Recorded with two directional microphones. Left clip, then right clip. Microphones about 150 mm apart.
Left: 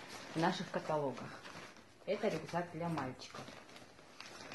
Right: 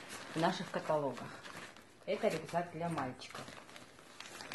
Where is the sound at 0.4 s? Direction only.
30° left (ahead or behind).